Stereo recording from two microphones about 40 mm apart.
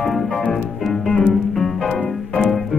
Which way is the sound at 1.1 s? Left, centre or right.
Left.